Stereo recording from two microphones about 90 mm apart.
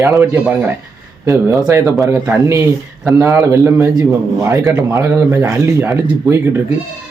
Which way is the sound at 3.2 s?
35° right (ahead or behind).